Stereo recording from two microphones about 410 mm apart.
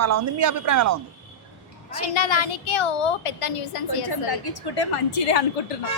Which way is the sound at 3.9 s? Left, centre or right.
Left.